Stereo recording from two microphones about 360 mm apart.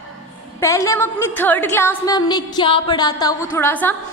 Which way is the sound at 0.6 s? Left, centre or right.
Centre.